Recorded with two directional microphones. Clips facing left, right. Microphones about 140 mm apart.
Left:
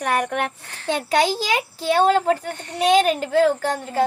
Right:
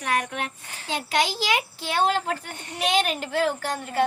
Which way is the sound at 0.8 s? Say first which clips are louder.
Left 6 dB; 45° left (ahead or behind).